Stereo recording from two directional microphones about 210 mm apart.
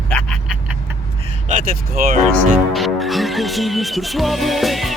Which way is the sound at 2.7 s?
Centre (ahead or behind).